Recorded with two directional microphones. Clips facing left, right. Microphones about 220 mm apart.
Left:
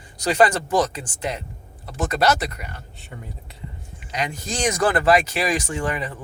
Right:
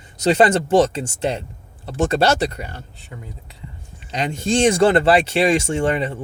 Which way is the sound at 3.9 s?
30° right (ahead or behind).